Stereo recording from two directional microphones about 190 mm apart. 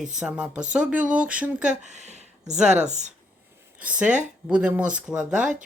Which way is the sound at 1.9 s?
35° right (ahead or behind).